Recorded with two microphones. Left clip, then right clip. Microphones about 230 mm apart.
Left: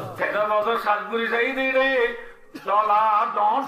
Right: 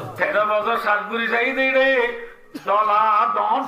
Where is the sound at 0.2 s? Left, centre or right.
Right.